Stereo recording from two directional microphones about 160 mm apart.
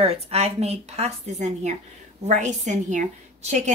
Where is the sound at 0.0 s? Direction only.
40° right (ahead or behind).